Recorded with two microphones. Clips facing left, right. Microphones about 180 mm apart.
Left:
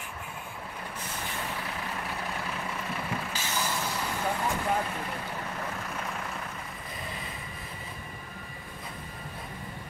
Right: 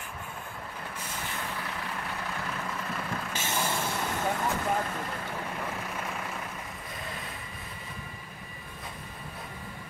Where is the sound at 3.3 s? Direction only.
25° right (ahead or behind).